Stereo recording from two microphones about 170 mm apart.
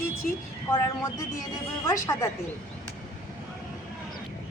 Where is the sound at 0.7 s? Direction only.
20° left (ahead or behind).